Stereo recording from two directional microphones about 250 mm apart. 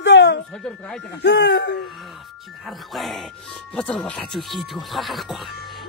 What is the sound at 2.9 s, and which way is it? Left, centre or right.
Speech, centre.